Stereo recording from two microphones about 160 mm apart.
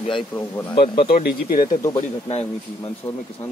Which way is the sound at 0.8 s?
75° left (ahead or behind).